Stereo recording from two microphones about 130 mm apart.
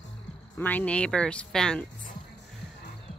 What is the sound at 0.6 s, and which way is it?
Speech, 15° left (ahead or behind).